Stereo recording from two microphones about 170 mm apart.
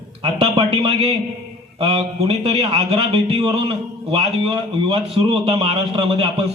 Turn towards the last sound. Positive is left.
turn(degrees=-35)  # may be behind; listen again after turning